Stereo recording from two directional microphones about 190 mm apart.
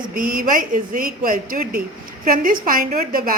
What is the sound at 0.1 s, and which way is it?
A woman's voice, 45° right (ahead or behind).